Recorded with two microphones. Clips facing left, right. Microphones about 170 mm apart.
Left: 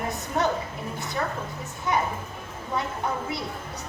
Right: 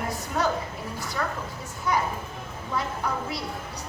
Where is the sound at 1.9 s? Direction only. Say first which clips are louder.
Even; 20° left (ahead or behind).